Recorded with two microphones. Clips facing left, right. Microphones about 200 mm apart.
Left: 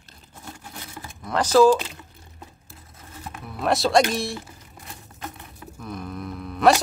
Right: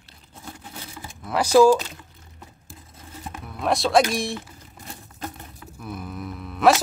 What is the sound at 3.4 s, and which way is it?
Speech, centre (ahead or behind).